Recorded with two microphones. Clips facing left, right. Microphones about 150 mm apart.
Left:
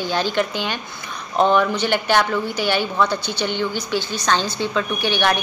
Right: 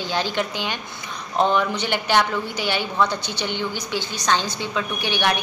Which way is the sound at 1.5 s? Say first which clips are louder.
Left 4 dB; 15° right (ahead or behind).